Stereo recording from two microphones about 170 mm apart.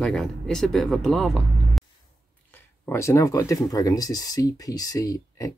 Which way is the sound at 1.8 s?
Centre (ahead or behind).